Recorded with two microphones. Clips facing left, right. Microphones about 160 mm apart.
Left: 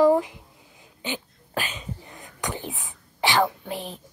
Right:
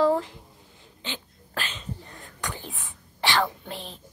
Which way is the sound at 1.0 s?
15° left (ahead or behind).